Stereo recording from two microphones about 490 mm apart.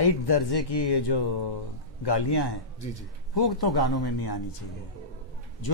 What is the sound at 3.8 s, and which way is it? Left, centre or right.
Speech, left.